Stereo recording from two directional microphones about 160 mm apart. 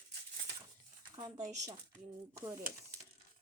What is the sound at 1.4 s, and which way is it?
Speech, 45° right (ahead or behind).